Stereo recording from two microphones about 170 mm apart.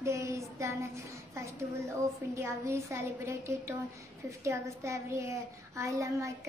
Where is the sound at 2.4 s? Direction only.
15° right (ahead or behind).